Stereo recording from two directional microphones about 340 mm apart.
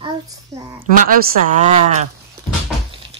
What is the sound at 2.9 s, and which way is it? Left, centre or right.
Music, centre.